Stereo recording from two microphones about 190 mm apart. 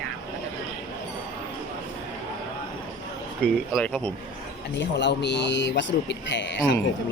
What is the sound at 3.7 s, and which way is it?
Speech, 5° left (ahead or behind).